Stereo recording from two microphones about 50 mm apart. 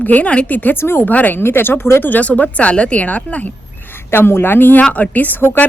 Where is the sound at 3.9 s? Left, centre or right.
Left.